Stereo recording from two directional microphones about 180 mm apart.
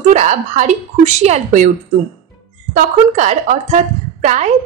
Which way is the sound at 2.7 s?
45° right (ahead or behind).